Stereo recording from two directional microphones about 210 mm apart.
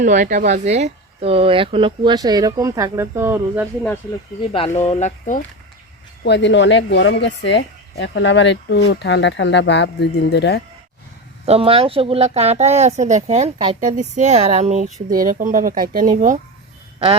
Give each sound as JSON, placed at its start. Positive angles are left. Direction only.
{"t": 0.0, "sound": "speech", "side_deg": -35}
{"t": 4.5, "sound": "speech", "side_deg": 30}
{"t": 6.2, "sound": "speech", "side_deg": 55}
{"t": 11.4, "sound": "speech", "side_deg": -25}